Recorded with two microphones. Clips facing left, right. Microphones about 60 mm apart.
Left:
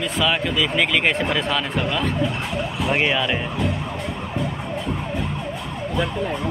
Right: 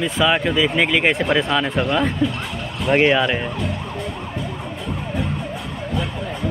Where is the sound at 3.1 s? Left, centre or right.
Centre.